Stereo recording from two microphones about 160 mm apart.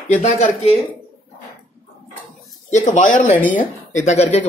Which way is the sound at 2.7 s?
50° left (ahead or behind).